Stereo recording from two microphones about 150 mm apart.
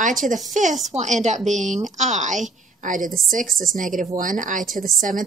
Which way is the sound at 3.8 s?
60° right (ahead or behind).